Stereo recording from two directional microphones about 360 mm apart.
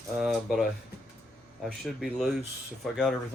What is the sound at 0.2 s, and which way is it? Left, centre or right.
Speech, centre.